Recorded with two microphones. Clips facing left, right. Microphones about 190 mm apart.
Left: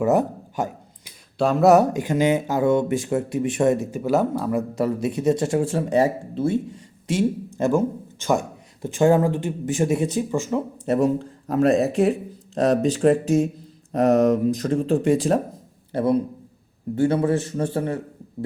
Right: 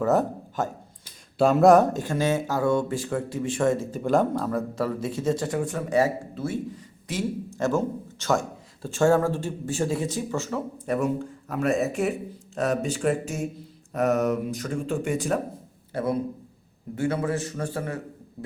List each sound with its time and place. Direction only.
0.0 s a sound: 15° left (ahead or behind)
1.4 s speech: centre (ahead or behind); by 3.8 s 20° left (ahead or behind)
3.9 s speech: 5° left (ahead or behind)
5.0 s speech: 20° left (ahead or behind)
10.8 s a man's voice: 30° left (ahead or behind)